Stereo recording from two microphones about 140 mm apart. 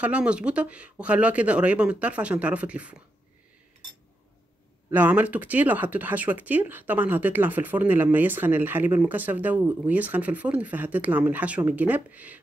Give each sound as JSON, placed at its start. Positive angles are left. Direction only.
{"t": 0.0, "sound": "speech", "side_deg": -10}
{"t": 4.9, "sound": "speech", "side_deg": -10}